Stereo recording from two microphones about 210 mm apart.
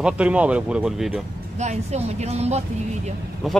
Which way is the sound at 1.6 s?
30° right (ahead or behind).